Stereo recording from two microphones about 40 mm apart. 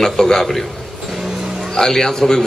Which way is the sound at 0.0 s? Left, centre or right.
Centre.